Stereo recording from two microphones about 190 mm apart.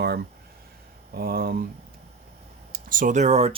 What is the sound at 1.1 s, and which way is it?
Speech, 55° right (ahead or behind).